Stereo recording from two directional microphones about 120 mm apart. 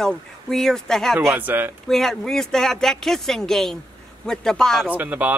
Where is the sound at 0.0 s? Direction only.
5° left (ahead or behind).